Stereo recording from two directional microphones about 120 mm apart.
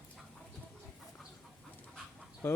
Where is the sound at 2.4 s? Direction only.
20° left (ahead or behind).